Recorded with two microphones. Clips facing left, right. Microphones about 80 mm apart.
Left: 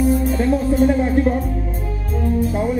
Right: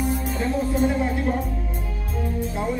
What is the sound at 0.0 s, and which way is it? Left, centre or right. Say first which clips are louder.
Music: left 8 dB; left.